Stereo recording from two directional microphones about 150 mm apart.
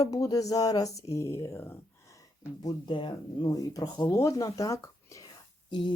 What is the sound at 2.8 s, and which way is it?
Speech, 30° left (ahead or behind).